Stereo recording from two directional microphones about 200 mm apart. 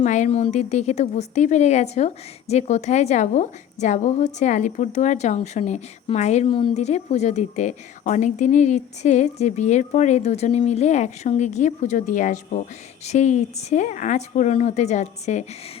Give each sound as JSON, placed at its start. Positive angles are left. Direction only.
{"t": 0.0, "sound": "a woman's voice", "side_deg": 35}